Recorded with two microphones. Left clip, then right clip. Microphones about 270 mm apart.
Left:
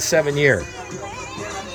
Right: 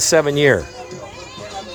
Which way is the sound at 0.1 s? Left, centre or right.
Centre.